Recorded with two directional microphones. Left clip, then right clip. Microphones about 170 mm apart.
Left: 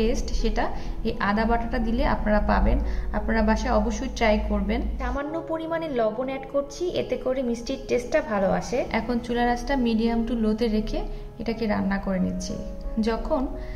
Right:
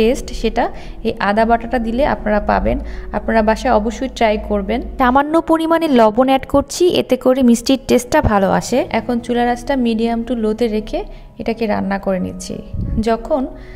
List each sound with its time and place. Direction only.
0.0 s a woman's voice: 50° right (ahead or behind)
4.9 s a woman's voice: 80° right
8.9 s a woman's voice: 45° right (ahead or behind)